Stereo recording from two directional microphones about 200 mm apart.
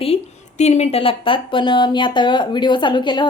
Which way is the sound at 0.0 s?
30° left (ahead or behind).